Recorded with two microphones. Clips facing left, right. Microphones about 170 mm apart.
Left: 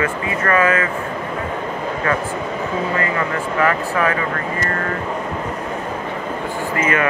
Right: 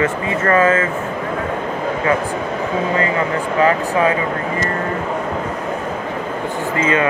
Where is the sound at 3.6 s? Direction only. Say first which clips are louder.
Right 3 dB; 20° right (ahead or behind).